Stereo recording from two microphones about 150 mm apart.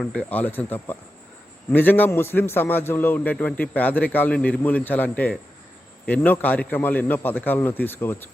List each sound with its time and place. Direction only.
0.0 s a man's voice: 5° left (ahead or behind)